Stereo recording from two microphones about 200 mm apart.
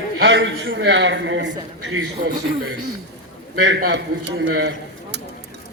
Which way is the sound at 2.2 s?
40° right (ahead or behind).